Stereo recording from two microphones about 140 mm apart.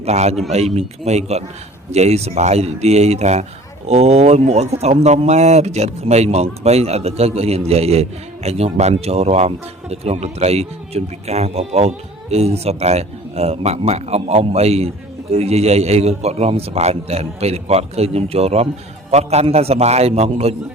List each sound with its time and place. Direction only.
0.0 s speech: 50° right (ahead or behind)